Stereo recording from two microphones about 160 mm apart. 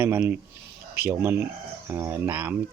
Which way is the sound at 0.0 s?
15° right (ahead or behind).